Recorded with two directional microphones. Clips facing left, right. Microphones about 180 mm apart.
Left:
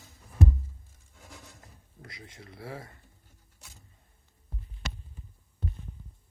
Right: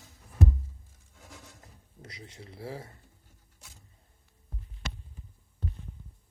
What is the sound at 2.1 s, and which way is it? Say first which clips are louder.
Speech: right 1 dB; 30° right (ahead or behind).